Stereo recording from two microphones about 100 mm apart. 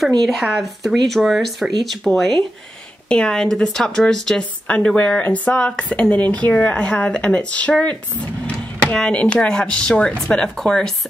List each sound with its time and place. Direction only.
0.2 s a woman's voice: centre (ahead or behind)